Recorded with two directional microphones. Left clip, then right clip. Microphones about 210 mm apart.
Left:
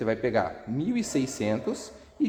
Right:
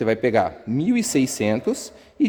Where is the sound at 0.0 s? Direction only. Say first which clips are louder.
Right 7 dB; 55° right (ahead or behind).